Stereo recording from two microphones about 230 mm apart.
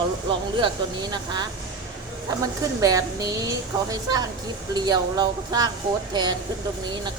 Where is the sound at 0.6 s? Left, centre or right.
Centre.